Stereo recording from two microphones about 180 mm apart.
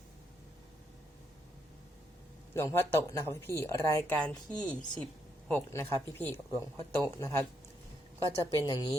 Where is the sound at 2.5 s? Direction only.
15° left (ahead or behind).